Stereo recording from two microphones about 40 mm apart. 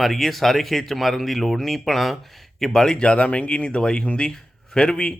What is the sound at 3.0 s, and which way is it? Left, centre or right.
Speech, left.